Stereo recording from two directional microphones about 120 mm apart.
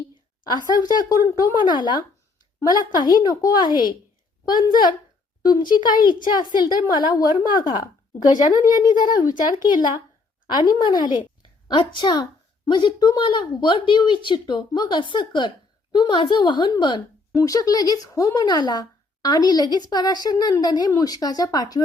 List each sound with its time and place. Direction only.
1.4 s a woman's voice: 35° left (ahead or behind)
17.3 s a woman's voice: 30° left (ahead or behind)